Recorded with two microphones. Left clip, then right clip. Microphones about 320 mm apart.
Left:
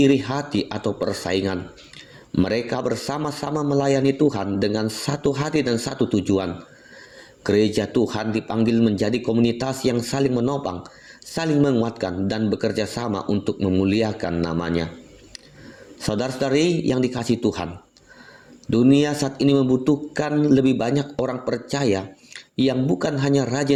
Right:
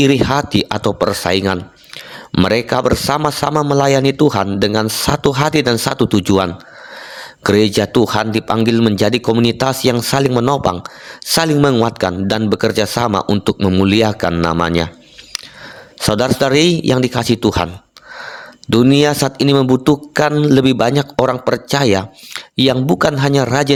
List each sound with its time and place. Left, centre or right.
0.0 s speech: right
16.0 s speech: right